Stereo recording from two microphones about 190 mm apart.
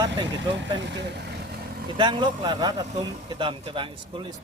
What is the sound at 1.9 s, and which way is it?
Speech, 25° right (ahead or behind).